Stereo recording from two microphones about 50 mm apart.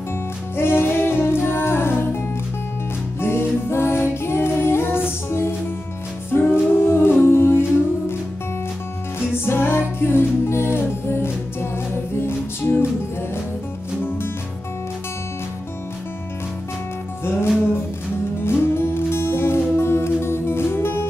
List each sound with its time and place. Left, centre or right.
0.6 s music: left
4.5 s child singing: left
6.3 s music: left
9.3 s music: left
17.2 s music: left